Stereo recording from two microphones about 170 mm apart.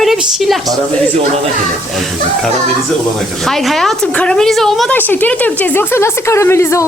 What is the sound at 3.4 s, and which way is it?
A woman's voice, centre (ahead or behind).